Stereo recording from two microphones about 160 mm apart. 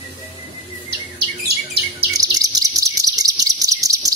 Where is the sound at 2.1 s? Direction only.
20° right (ahead or behind).